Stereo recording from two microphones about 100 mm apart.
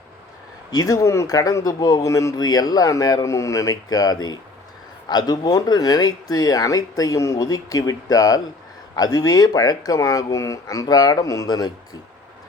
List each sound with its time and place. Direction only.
0.7 s speech: 40° left (ahead or behind)